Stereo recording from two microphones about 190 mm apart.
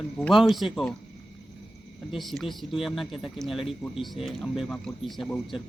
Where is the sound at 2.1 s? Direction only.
Centre (ahead or behind).